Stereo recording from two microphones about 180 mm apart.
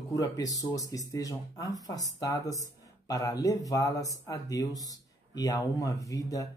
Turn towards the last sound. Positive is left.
turn(degrees=20)  # may be behind; listen again after turning